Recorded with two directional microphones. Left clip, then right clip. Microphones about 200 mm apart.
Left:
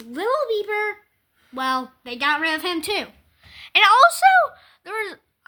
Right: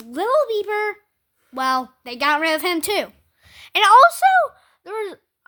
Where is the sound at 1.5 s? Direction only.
65° right (ahead or behind).